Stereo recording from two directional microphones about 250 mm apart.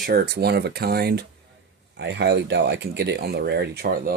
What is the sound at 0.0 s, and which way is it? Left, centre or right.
Speech, right.